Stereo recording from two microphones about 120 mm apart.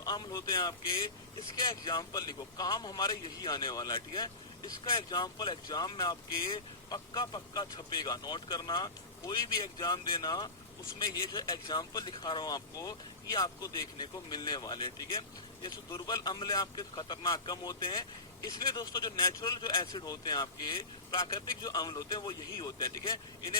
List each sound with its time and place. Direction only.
0.0 s speech: 35° left (ahead or behind)
21.6 s speech: 35° left (ahead or behind)